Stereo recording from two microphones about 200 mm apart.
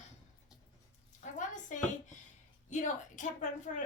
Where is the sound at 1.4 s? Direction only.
40° left (ahead or behind).